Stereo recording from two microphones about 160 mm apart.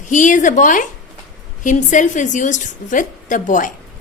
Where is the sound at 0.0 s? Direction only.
50° left (ahead or behind).